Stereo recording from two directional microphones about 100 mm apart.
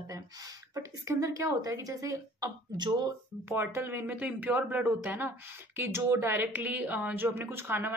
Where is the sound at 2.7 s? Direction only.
50° right (ahead or behind).